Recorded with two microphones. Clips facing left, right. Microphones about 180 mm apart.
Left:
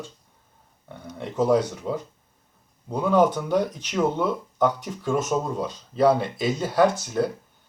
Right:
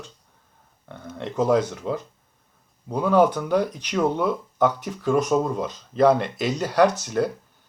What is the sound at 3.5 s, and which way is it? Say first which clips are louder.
Speech: right 1 dB; centre (ahead or behind).